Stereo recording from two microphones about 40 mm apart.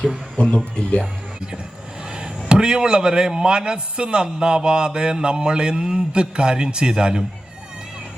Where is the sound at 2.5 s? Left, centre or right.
Right.